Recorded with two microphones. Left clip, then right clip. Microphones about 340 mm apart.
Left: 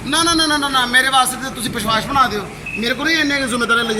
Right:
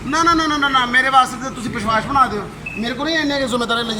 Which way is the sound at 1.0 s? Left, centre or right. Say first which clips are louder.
Right 1 dB; centre.